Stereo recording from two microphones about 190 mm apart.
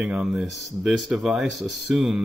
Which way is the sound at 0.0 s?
5° right (ahead or behind).